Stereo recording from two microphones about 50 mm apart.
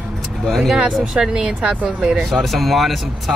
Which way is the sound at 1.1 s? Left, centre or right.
Centre.